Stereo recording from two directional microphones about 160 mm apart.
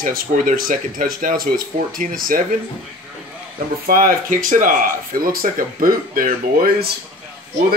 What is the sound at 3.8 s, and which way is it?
Speech, 60° right (ahead or behind).